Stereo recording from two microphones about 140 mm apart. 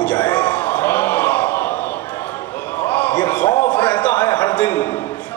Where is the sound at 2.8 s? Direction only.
10° left (ahead or behind).